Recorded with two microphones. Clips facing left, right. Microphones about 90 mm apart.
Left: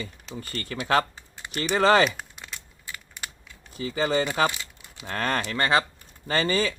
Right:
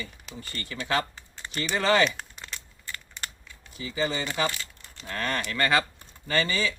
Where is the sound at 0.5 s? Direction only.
45° left (ahead or behind).